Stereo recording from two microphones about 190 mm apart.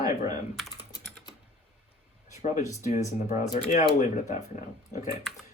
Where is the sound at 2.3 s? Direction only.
40° left (ahead or behind).